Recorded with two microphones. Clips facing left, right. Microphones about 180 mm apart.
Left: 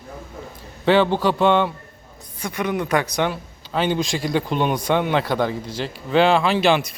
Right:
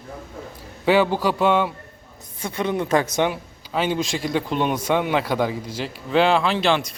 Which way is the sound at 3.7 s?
5° right (ahead or behind).